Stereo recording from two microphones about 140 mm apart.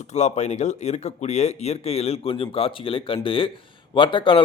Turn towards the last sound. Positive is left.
turn(degrees=35)  # may be behind; listen again after turning